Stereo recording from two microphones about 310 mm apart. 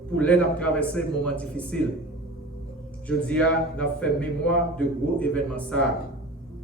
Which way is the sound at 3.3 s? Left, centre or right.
Centre.